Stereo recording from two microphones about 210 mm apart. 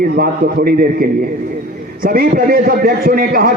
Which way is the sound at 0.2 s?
45° right (ahead or behind).